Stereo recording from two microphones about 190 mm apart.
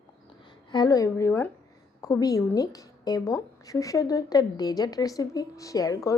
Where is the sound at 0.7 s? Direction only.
20° left (ahead or behind).